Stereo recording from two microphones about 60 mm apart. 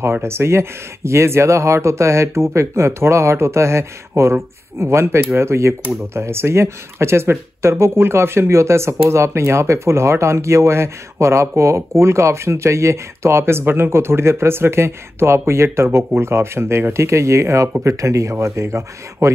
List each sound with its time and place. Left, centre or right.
0.0 s speech: right